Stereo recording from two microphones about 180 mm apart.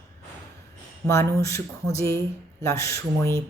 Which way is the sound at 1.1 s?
15° left (ahead or behind).